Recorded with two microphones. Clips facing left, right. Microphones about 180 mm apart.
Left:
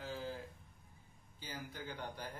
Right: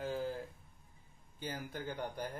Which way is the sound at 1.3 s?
55° right (ahead or behind).